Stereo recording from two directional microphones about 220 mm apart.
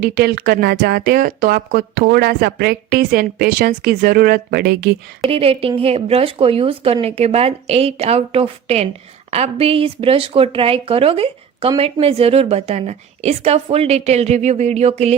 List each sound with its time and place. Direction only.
0.0 s a woman's voice: 45° right (ahead or behind)
5.3 s speech: 25° right (ahead or behind)